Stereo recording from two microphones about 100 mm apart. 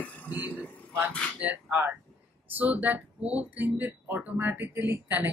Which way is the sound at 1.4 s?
15° right (ahead or behind).